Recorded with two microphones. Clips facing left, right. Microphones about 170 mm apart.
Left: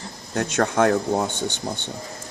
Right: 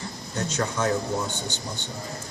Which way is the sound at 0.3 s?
60° left (ahead or behind).